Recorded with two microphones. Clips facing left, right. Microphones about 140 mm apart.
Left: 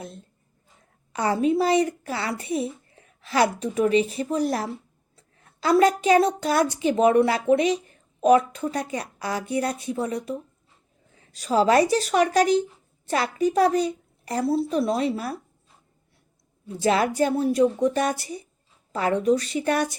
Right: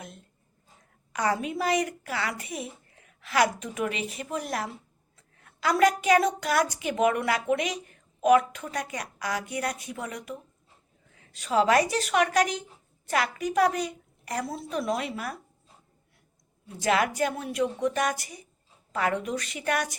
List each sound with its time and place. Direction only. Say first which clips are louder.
1.1 s a woman's voice: left 6 dB; 30° left (ahead or behind)
16.6 s a woman's voice: left 4 dB; 30° left (ahead or behind)